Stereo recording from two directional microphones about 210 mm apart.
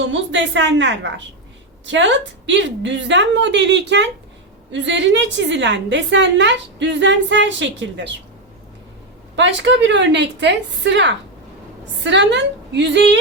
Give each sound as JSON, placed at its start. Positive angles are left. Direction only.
{"t": 0.0, "sound": "a woman's voice", "side_deg": -60}
{"t": 9.3, "sound": "a woman's voice", "side_deg": -60}